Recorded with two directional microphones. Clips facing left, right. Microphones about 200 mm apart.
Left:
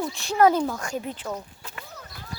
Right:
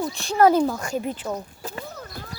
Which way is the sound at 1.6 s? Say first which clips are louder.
Right 8 dB; 40° right (ahead or behind).